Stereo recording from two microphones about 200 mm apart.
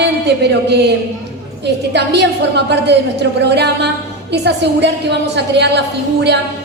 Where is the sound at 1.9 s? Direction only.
60° right (ahead or behind).